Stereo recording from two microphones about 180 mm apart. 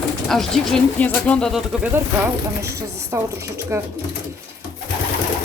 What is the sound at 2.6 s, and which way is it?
Speech, 15° right (ahead or behind).